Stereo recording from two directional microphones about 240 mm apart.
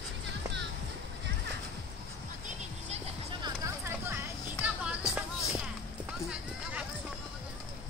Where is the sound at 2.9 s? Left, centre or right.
Right.